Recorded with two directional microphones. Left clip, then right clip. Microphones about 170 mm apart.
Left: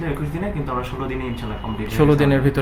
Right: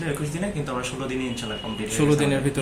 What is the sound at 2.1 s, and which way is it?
Speech, 40° left (ahead or behind).